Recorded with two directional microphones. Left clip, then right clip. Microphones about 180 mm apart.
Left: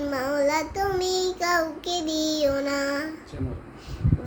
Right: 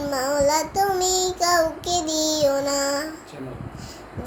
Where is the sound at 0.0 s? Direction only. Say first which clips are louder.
Right 3 dB; 10° left (ahead or behind).